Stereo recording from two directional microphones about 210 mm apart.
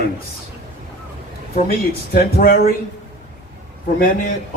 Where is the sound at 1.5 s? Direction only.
45° left (ahead or behind).